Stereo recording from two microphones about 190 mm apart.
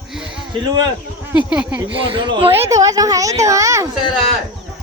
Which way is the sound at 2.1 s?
25° right (ahead or behind).